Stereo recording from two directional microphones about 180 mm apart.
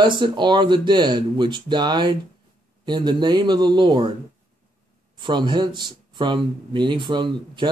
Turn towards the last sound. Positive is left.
turn(degrees=-25)  # may be behind; listen again after turning